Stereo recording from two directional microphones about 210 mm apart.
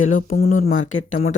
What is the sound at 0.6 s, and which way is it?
Speech, 70° left (ahead or behind).